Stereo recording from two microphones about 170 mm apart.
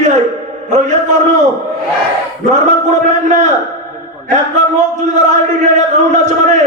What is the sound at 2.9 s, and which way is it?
Speech, 45° right (ahead or behind).